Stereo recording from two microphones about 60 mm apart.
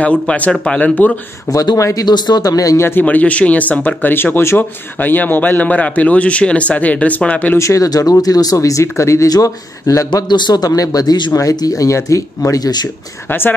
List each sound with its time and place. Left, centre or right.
0.0 s speech: left
1.5 s speech: left
2.8 s speech: left
7.5 s speech: left
9.3 s speech: left
12.4 s speech: left
13.3 s speech: left